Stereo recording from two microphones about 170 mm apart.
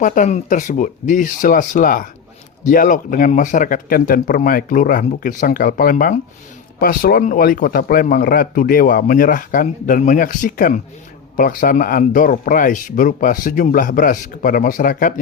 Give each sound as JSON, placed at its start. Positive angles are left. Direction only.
{"t": 0.0, "sound": "speech", "side_deg": 50}